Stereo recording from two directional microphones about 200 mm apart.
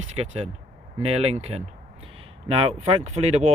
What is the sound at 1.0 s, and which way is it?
Speech, 30° right (ahead or behind).